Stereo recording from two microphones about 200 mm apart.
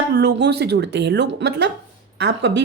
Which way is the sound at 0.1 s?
55° right (ahead or behind).